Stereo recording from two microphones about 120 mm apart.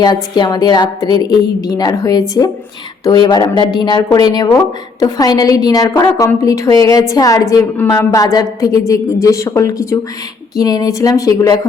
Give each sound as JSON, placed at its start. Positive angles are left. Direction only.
{"t": 0.0, "sound": "a woman's voice", "side_deg": 35}